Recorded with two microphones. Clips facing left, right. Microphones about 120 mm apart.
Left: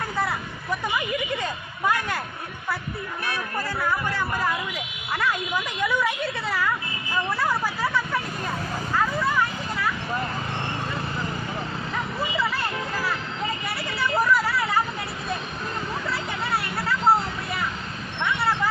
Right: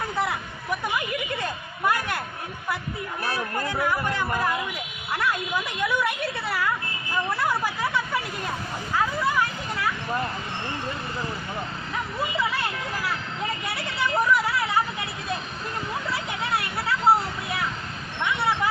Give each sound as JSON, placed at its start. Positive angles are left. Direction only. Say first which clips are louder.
{"t": 6.5, "sound": "speech", "louder": "left 1 dB", "side_deg": -5}
{"t": 7.8, "sound": "hubbub", "louder": "left 1 dB", "side_deg": 0}
{"t": 13.7, "sound": "speech", "louder": "even", "side_deg": 0}
{"t": 16.4, "sound": "a sound", "louder": "even", "side_deg": 0}
{"t": 18.2, "sound": "vehicle", "louder": "even", "side_deg": 0}